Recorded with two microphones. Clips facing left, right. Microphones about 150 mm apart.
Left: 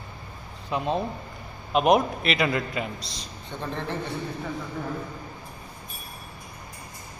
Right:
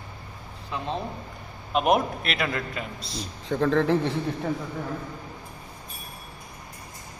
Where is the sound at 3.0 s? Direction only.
5° right (ahead or behind).